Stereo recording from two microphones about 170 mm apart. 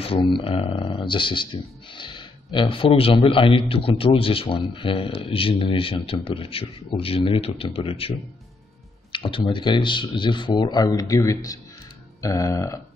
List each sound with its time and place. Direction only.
0.0 s speech: 30° left (ahead or behind)
9.1 s speech: 30° left (ahead or behind)